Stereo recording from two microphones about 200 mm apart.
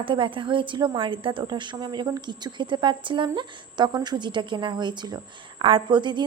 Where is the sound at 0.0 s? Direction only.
25° right (ahead or behind).